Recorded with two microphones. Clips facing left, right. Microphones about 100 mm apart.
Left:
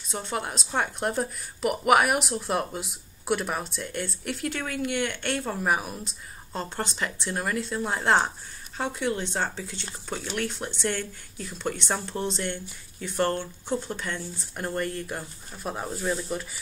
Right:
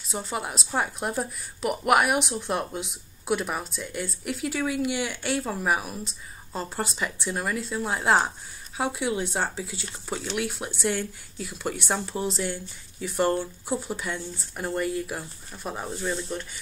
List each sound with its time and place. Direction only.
0.1 s speech: 5° right (ahead or behind)